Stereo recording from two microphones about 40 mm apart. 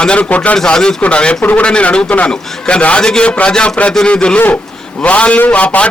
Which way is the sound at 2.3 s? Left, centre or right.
Left.